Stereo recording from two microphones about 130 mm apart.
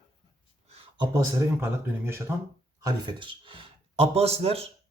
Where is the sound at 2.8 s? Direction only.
35° right (ahead or behind).